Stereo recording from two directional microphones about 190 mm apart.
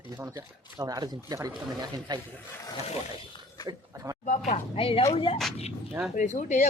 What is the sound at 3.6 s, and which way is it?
Oink, 20° right (ahead or behind).